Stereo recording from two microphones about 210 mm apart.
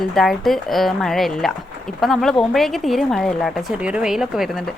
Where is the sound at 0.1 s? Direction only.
Centre (ahead or behind).